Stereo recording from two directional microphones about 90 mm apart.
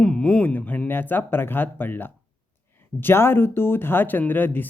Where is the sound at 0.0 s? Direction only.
10° left (ahead or behind).